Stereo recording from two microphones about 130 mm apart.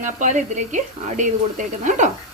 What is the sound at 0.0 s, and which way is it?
A woman's voice, 70° right (ahead or behind).